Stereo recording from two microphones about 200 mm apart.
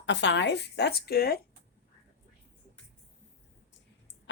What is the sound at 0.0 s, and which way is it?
Speech, 60° left (ahead or behind).